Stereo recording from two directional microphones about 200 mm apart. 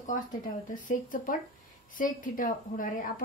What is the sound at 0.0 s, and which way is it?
A woman's voice, 40° left (ahead or behind).